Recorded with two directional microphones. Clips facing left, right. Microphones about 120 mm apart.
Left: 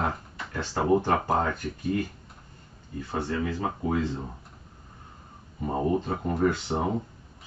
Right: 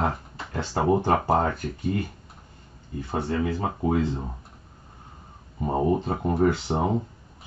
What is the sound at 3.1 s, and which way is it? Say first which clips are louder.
Speech: right 3 dB; 25° right (ahead or behind).